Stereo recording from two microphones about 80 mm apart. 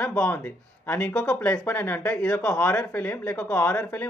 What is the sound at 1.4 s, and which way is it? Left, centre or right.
Speech, left.